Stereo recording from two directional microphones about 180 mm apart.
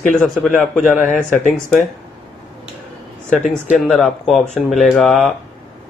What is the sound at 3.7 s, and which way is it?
Speech, centre (ahead or behind).